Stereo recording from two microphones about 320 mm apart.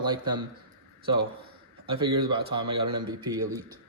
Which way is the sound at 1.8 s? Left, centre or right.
Centre.